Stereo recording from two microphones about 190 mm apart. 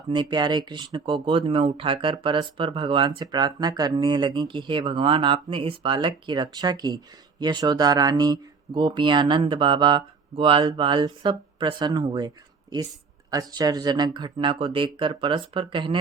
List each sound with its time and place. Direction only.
0.1 s speech: 25° right (ahead or behind)
13.3 s speech: 20° right (ahead or behind)